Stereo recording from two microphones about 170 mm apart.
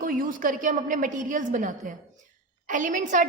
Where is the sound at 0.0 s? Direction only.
55° right (ahead or behind).